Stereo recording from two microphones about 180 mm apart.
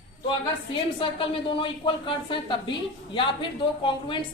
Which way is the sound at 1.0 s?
30° left (ahead or behind).